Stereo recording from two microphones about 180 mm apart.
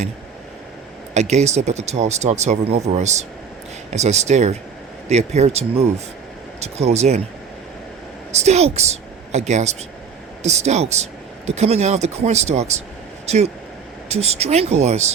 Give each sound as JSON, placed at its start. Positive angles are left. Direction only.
{"t": 1.1, "sound": "speech", "side_deg": -40}
{"t": 8.3, "sound": "speech", "side_deg": -40}